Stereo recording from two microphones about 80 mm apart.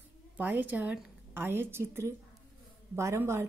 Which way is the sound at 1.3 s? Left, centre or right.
Right.